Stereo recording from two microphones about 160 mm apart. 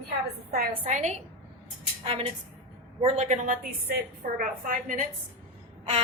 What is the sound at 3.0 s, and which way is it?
A woman's voice, 45° right (ahead or behind).